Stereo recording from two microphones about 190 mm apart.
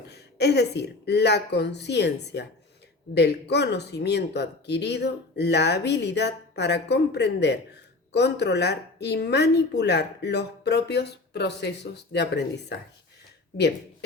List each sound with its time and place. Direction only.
0.1 s speech: 60° left (ahead or behind)